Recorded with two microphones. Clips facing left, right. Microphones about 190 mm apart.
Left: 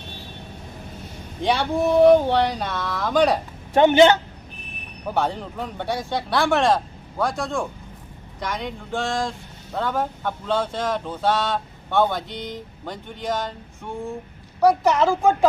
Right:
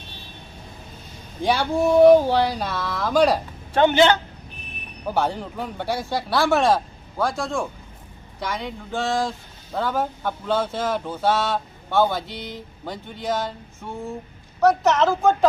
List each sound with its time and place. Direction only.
1.4 s speech: centre (ahead or behind)
3.8 s a woman's voice: 15° left (ahead or behind)
5.0 s speech: centre (ahead or behind)
14.6 s a woman's voice: 10° left (ahead or behind)